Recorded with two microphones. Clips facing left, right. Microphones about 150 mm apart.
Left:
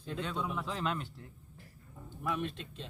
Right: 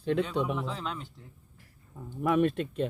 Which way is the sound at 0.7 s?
Centre (ahead or behind).